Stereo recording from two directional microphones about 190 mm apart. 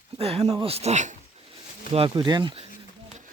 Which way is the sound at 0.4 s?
20° right (ahead or behind).